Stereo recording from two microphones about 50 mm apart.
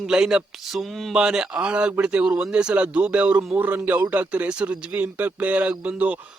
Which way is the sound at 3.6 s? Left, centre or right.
Right.